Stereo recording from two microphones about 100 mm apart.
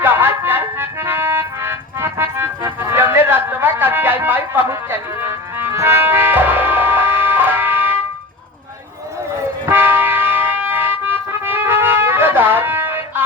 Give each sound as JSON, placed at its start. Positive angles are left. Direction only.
{"t": 0.0, "sound": "music", "side_deg": -20}
{"t": 9.6, "sound": "a sound", "side_deg": -20}
{"t": 11.0, "sound": "music", "side_deg": -20}